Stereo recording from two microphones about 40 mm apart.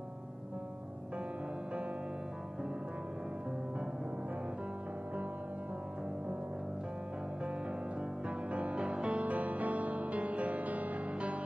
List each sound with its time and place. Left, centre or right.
8.3 s music: right